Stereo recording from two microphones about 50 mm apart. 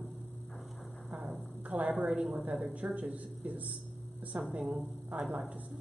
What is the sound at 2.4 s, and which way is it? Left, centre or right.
Speech, right.